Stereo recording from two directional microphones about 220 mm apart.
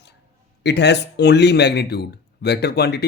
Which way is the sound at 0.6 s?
50° left (ahead or behind).